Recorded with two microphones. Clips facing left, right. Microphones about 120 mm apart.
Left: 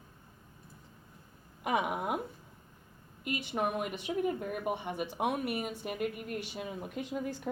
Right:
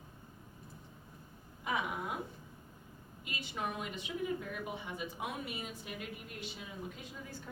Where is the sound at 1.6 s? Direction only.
65° left (ahead or behind).